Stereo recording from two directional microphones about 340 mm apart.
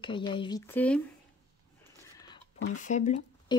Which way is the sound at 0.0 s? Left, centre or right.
Centre.